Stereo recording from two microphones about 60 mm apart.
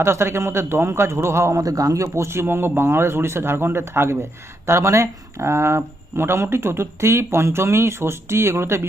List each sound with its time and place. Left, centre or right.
0.0 s speech: right
2.2 s speech: right